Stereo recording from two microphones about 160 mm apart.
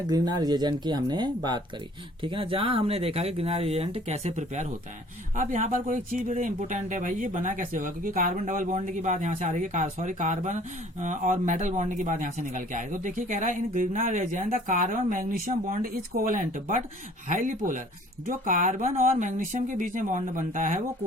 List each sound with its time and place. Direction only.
0.1 s speech: 25° right (ahead or behind); by 20.8 s 55° right (ahead or behind)